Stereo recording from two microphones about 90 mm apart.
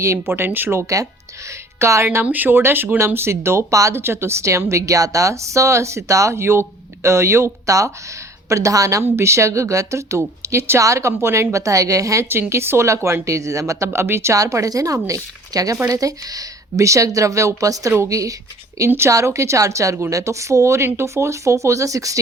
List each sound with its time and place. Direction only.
0.0 s speech: 30° right (ahead or behind)
2.2 s speech: 20° right (ahead or behind); by 18.3 s 40° right (ahead or behind)
18.9 s speech: 30° right (ahead or behind)